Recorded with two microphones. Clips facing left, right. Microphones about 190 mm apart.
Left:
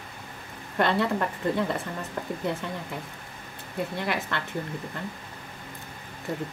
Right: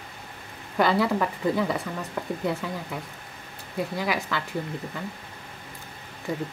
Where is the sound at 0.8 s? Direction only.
Centre (ahead or behind).